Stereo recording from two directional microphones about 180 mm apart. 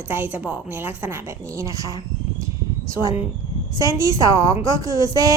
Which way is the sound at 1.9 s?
20° right (ahead or behind).